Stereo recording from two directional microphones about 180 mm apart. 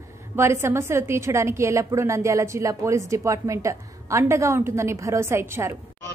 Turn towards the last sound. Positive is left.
turn(degrees=-15)  # may be behind; listen again after turning